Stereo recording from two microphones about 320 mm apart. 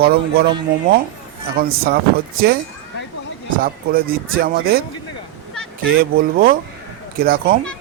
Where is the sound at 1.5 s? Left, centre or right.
Right.